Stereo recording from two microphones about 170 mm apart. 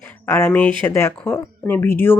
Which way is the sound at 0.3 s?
15° left (ahead or behind).